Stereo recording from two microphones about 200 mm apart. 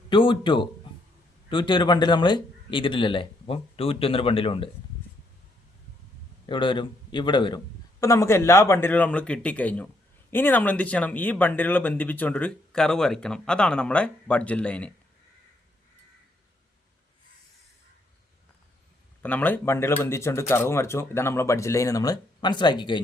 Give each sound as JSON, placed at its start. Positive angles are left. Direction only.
{"t": 0.1, "sound": "speech", "side_deg": 25}
{"t": 6.4, "sound": "a man's voice", "side_deg": 25}
{"t": 19.2, "sound": "speech", "side_deg": 10}